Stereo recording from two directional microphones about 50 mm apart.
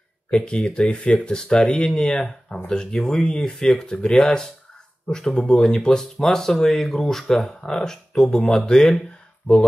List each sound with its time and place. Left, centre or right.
0.3 s speech: centre
1.9 s speech: centre